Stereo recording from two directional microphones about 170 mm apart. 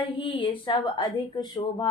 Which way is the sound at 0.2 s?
30° left (ahead or behind).